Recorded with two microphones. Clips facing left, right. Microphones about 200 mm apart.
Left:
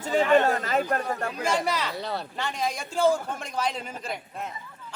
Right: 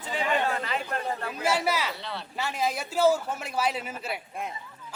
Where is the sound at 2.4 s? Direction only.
5° right (ahead or behind).